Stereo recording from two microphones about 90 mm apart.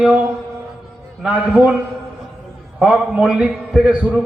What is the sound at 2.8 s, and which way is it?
A man's voice, 5° right (ahead or behind).